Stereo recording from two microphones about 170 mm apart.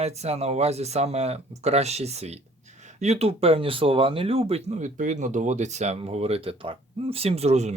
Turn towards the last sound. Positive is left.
turn(degrees=-40)  # may be behind; listen again after turning